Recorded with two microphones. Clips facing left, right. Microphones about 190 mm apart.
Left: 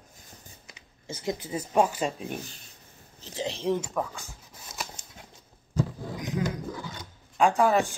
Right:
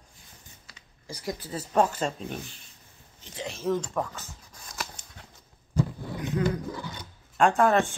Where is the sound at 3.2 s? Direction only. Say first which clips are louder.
Left 4 dB; 30° left (ahead or behind).